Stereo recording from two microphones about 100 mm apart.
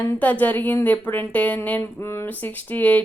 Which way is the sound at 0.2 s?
15° left (ahead or behind).